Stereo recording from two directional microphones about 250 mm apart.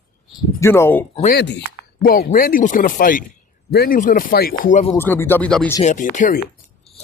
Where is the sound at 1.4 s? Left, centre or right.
Left.